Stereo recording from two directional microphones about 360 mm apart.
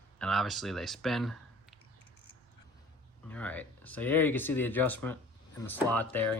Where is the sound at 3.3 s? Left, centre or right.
Centre.